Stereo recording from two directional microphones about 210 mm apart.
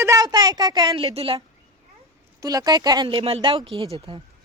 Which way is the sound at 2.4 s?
20° right (ahead or behind).